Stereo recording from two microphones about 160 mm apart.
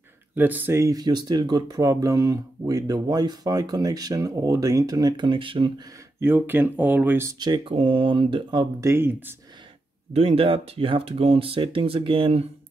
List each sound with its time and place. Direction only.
0.3 s speech: 10° right (ahead or behind); by 5.7 s 35° right (ahead or behind)
6.1 s speech: 10° right (ahead or behind)
7.3 s speech: 25° right (ahead or behind)
10.1 s speech: 40° right (ahead or behind)